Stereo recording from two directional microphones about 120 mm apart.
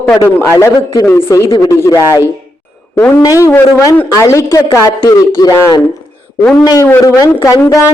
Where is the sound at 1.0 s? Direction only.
20° left (ahead or behind).